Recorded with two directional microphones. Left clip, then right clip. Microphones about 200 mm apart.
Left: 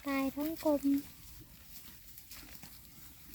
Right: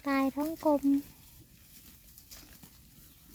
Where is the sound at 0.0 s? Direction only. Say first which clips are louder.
Right 5 dB; 20° right (ahead or behind).